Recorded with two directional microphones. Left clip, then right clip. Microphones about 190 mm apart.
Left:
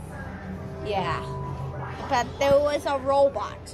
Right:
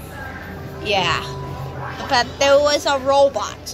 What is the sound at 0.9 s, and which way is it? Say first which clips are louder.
Speech: right 9 dB; centre (ahead or behind).